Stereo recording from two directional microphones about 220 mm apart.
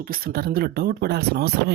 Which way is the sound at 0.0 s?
40° right (ahead or behind).